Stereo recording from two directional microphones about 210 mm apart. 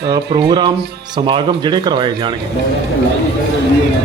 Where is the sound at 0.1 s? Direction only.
20° right (ahead or behind).